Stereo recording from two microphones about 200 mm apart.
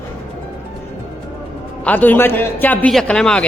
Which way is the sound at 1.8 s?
10° left (ahead or behind).